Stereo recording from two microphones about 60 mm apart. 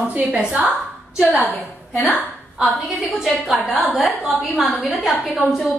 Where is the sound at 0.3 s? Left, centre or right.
Centre.